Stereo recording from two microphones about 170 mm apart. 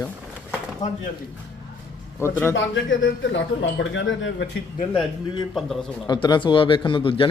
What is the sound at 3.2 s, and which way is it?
Speech, 90° left.